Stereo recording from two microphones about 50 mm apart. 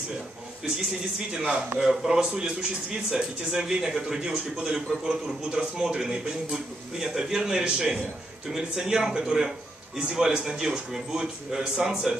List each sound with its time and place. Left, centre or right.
1.3 s a man's voice: centre